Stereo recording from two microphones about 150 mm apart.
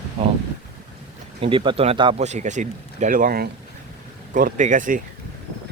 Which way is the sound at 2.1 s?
50° right (ahead or behind).